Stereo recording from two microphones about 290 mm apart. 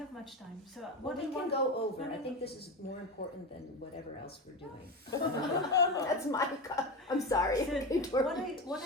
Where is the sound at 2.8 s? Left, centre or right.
Left.